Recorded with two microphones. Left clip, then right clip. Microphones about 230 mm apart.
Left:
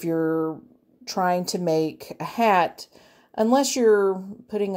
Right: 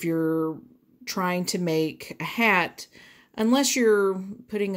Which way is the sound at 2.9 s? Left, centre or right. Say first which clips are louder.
Left 6 dB; right.